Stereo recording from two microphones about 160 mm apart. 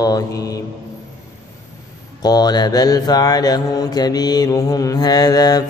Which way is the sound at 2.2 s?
25° left (ahead or behind).